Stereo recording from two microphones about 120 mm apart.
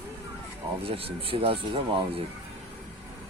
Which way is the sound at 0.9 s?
50° right (ahead or behind).